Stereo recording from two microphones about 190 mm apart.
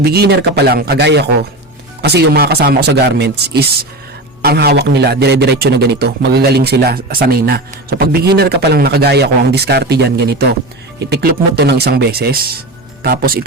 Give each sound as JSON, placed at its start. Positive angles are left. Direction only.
{"t": 0.0, "sound": "a man's voice", "side_deg": -60}